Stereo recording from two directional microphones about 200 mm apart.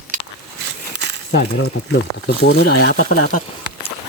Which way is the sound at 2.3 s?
55° left (ahead or behind).